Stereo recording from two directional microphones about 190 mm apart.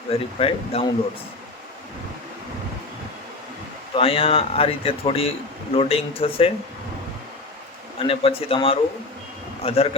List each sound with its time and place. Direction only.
0.1 s speech: 30° left (ahead or behind)
3.9 s speech: 30° left (ahead or behind)
7.9 s speech: 30° left (ahead or behind)